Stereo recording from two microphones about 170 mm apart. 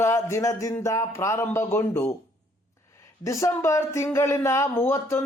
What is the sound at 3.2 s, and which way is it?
Speech, 20° left (ahead or behind).